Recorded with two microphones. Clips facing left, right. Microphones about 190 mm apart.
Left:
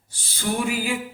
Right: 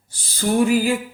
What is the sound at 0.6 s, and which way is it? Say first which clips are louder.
Mantra: right 8 dB; 40° right (ahead or behind).